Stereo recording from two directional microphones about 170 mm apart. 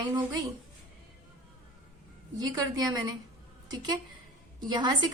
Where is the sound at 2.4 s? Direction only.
20° right (ahead or behind).